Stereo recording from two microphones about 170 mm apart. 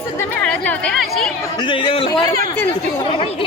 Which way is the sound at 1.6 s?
30° left (ahead or behind).